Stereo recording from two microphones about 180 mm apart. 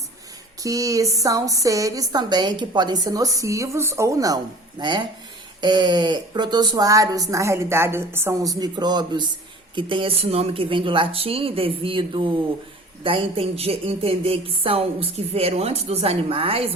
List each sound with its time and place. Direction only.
0.6 s speech: 20° right (ahead or behind)